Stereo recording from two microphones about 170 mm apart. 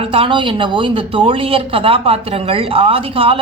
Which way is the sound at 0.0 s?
35° right (ahead or behind).